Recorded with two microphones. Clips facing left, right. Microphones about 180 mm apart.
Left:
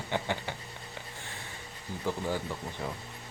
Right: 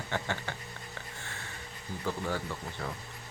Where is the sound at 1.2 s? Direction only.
15° left (ahead or behind).